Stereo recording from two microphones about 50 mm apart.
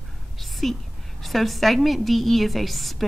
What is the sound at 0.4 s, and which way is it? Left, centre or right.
Whispering, centre.